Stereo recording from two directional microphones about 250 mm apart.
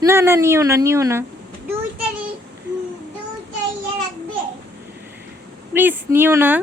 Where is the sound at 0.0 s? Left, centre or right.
Centre.